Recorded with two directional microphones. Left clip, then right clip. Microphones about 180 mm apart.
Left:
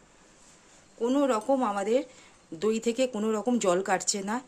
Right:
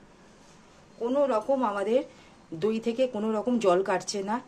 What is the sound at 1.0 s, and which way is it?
Speech, 55° left (ahead or behind).